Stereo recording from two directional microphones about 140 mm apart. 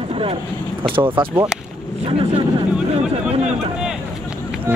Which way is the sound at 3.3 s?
50° right (ahead or behind).